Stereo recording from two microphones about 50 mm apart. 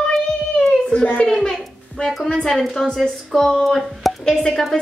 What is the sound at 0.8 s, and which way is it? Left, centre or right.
Speech, left.